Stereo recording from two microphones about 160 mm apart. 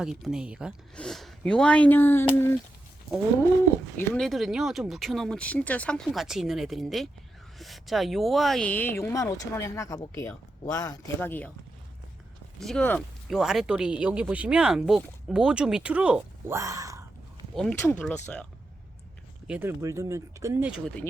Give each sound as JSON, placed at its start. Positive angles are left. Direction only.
{"t": 0.0, "sound": "speech", "side_deg": -5}
{"t": 3.9, "sound": "speech", "side_deg": 5}
{"t": 11.2, "sound": "speech", "side_deg": 10}
{"t": 12.5, "sound": "speech", "side_deg": 5}
{"t": 16.6, "sound": "speech", "side_deg": -20}
{"t": 17.5, "sound": "speech", "side_deg": 0}
{"t": 19.5, "sound": "speech", "side_deg": -15}
{"t": 20.7, "sound": "speech", "side_deg": -5}